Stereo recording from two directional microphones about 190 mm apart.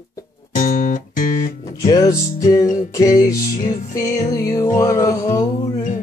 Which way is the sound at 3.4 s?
45° left (ahead or behind).